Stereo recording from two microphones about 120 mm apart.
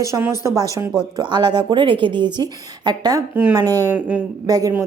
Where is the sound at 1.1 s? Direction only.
40° right (ahead or behind).